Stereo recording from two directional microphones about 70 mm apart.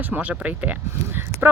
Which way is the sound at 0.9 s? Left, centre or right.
Right.